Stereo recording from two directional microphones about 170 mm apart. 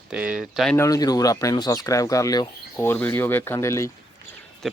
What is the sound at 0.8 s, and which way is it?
Speech, 20° left (ahead or behind).